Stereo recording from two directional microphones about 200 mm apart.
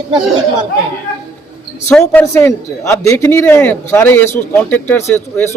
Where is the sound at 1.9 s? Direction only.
10° left (ahead or behind).